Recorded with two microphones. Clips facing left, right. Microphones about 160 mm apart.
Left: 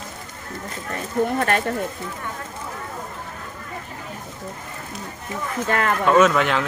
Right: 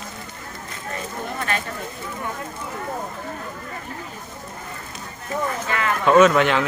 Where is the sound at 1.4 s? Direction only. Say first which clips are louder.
Left 5 dB; 55° left (ahead or behind).